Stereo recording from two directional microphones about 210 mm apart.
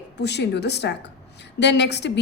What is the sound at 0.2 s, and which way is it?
A woman's voice, 55° left (ahead or behind).